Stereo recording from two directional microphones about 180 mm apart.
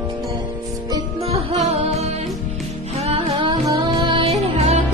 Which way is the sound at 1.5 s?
35° right (ahead or behind).